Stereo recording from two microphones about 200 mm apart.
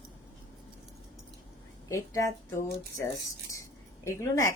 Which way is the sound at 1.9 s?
15° left (ahead or behind).